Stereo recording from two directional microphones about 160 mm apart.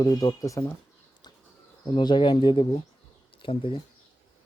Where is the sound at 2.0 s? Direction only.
30° left (ahead or behind).